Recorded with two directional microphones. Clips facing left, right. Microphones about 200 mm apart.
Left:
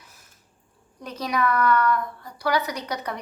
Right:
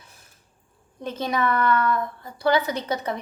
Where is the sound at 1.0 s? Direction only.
25° right (ahead or behind).